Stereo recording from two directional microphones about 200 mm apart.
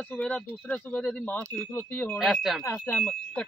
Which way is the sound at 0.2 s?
10° left (ahead or behind).